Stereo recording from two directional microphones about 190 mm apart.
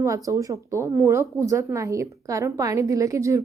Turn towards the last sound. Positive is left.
turn(degrees=-15)  # may be behind; listen again after turning